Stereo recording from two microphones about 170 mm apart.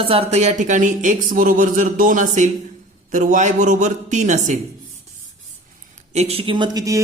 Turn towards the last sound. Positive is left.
turn(degrees=-20)  # may be behind; listen again after turning